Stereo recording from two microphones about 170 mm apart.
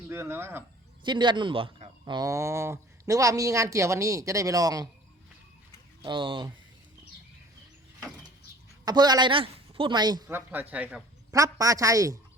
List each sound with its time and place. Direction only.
0.1 s speech: 15° right (ahead or behind)
1.0 s speech: 25° right (ahead or behind)
6.0 s speech: 30° right (ahead or behind)
8.8 s a woman's voice: 25° right (ahead or behind)
10.2 s speech: 10° right (ahead or behind)
11.3 s speech: 20° right (ahead or behind)